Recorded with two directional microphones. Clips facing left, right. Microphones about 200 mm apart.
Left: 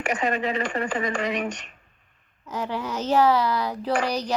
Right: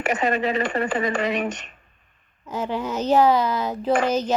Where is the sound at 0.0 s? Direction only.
35° right (ahead or behind).